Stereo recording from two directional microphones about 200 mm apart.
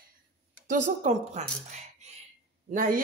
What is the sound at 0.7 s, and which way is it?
A woman's voice, 40° right (ahead or behind).